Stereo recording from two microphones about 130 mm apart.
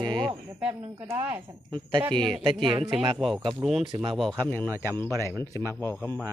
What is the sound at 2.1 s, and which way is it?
Speech, 5° left (ahead or behind).